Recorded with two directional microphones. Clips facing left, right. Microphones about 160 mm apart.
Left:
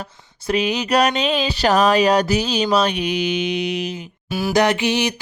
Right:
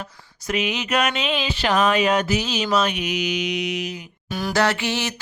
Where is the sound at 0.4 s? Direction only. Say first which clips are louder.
Left 5 dB; 35° left (ahead or behind).